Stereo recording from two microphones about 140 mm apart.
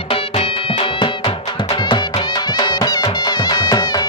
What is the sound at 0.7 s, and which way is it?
Music, 40° left (ahead or behind).